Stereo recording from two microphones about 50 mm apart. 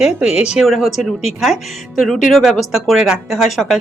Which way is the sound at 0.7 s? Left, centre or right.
Centre.